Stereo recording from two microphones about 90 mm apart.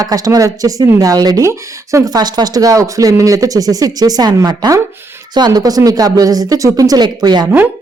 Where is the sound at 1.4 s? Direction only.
35° right (ahead or behind); by 7.4 s 55° right (ahead or behind).